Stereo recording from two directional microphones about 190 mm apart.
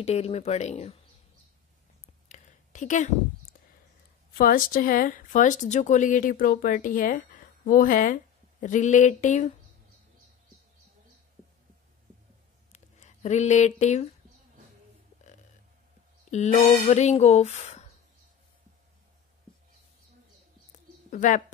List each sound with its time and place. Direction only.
0.0 s speech: 35° left (ahead or behind)
2.2 s a sound: 40° left (ahead or behind)
4.4 s speech: 50° left (ahead or behind)
12.7 s a sound: 35° left (ahead or behind)
16.5 s speech: 40° left (ahead or behind)
21.1 s speech: 40° left (ahead or behind)